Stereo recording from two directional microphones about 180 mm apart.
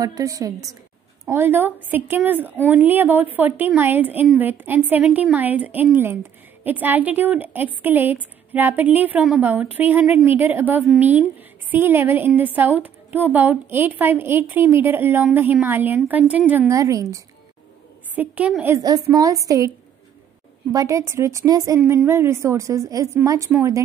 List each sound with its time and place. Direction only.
0.0 s a woman's voice: 20° right (ahead or behind)
18.8 s a woman's voice: 20° right (ahead or behind)
20.7 s a woman's voice: 15° right (ahead or behind)